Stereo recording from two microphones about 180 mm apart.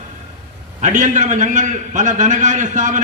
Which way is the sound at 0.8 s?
45° right (ahead or behind).